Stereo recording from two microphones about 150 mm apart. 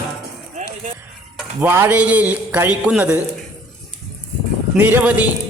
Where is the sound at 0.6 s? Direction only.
55° right (ahead or behind).